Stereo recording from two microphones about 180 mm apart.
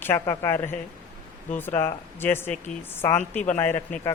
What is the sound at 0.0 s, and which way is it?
Speech, 15° left (ahead or behind).